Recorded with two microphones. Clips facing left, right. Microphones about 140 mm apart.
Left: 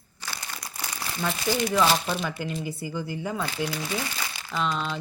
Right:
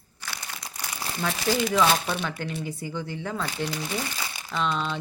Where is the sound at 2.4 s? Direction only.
70° right (ahead or behind).